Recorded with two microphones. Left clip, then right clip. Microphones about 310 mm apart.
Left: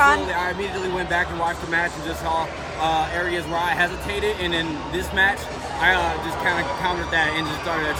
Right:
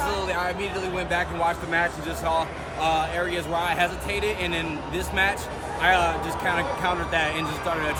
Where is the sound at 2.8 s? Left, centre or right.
Centre.